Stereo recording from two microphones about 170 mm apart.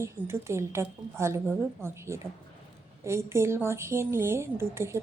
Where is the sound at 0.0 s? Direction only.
15° right (ahead or behind).